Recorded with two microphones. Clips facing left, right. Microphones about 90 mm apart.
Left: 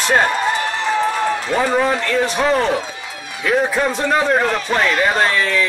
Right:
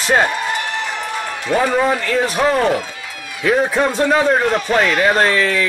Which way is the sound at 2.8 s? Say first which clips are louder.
Left 1 dB; 20° left (ahead or behind).